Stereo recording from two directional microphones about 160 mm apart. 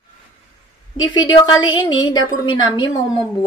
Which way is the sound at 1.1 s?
25° left (ahead or behind).